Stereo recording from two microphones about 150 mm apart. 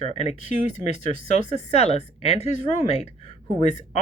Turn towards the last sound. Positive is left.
turn(degrees=50)  # may be behind; listen again after turning